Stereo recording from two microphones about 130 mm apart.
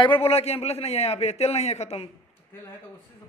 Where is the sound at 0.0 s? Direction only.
45° left (ahead or behind).